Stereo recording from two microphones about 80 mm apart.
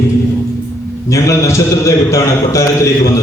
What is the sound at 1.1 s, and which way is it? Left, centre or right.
A man's voice, left.